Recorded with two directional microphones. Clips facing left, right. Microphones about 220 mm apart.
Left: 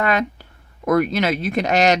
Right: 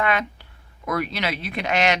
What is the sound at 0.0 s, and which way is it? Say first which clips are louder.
Speech: left 3 dB; 40° left (ahead or behind).